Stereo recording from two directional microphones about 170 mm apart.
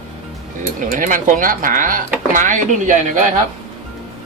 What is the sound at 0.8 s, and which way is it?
Speech, 50° right (ahead or behind).